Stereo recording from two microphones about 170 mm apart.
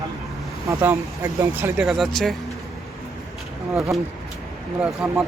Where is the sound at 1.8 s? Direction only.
Centre (ahead or behind).